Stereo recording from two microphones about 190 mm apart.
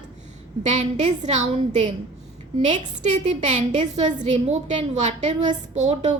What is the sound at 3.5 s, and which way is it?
A woman's voice, 35° right (ahead or behind).